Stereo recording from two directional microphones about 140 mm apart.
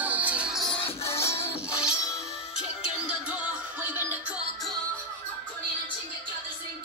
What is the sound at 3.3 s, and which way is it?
Music, 10° right (ahead or behind).